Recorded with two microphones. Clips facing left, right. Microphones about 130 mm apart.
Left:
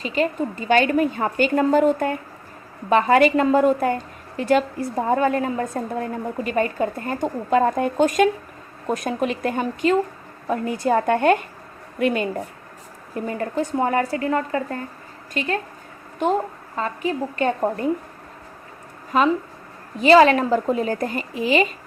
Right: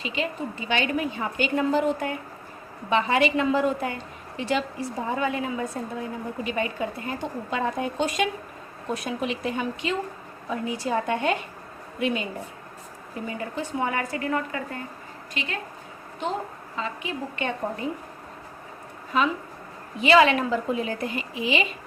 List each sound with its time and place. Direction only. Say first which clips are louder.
0.0 s a woman's voice: left 7 dB; 45° left (ahead or behind)
16.7 s a woman's voice: left 7 dB; 45° left (ahead or behind)
19.1 s a woman's voice: left 6 dB; 45° left (ahead or behind)